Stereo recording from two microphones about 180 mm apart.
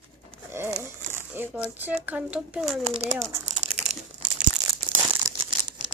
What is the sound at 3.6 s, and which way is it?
Crumpling, 90° right.